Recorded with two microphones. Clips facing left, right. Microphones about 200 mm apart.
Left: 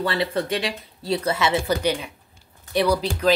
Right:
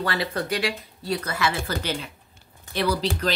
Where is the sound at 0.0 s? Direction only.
25° left (ahead or behind).